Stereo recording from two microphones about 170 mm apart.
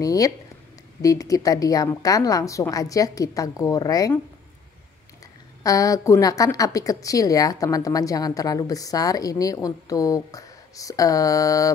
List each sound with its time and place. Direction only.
0.0 s a woman's voice: 20° left (ahead or behind)
5.6 s a woman's voice: 20° left (ahead or behind)